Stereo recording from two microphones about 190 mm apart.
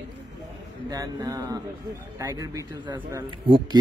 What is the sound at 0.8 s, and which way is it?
Speech, 20° right (ahead or behind).